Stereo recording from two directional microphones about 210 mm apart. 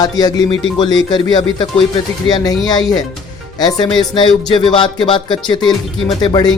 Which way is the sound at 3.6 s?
20° left (ahead or behind).